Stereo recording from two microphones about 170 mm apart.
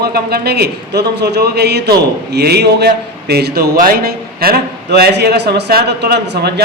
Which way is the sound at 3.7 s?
55° right (ahead or behind).